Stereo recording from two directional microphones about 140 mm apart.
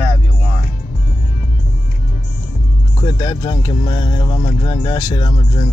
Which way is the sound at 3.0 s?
30° left (ahead or behind).